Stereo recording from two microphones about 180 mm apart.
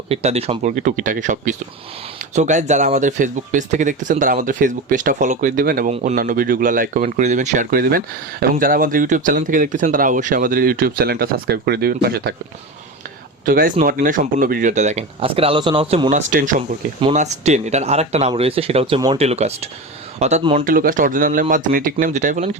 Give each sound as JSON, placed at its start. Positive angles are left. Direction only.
{"t": 0.1, "sound": "speech", "side_deg": -35}
{"t": 13.4, "sound": "speech", "side_deg": -50}
{"t": 20.7, "sound": "speech", "side_deg": -50}